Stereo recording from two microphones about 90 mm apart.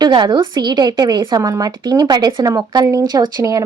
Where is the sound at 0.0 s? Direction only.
50° right (ahead or behind).